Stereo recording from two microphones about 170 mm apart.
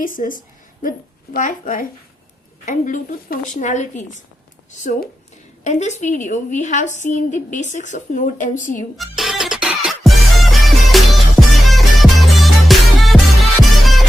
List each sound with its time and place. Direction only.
0.0 s a woman's voice: 55° left (ahead or behind)
9.0 s music: centre (ahead or behind)